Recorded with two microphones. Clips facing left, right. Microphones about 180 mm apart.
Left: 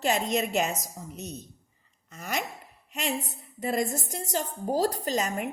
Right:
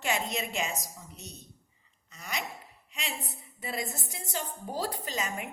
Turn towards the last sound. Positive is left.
turn(degrees=40)  # may be behind; listen again after turning